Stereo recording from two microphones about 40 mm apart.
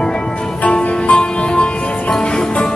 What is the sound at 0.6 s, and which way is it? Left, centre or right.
Music, left.